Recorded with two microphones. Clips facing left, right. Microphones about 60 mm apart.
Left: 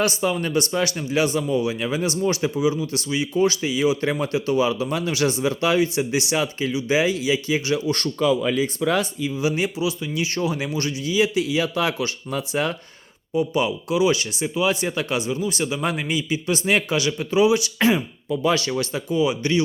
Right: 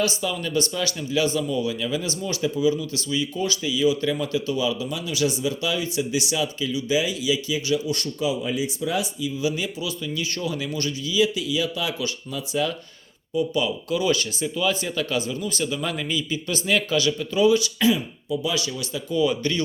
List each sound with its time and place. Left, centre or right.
0.0 s speech: left
9.4 s a man's voice: left
13.3 s a man's voice: left
17.7 s speech: left
19.1 s a man's voice: centre